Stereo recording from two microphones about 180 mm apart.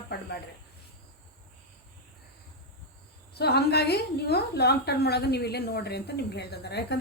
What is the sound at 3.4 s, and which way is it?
A woman's voice, 65° left (ahead or behind).